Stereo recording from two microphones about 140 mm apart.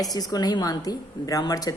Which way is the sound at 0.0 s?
25° left (ahead or behind).